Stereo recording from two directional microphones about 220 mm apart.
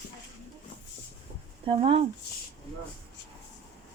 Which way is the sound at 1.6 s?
25° right (ahead or behind).